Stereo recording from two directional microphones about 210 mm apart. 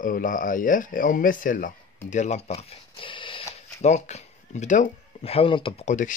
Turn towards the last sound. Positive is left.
turn(degrees=35)  # may be behind; listen again after turning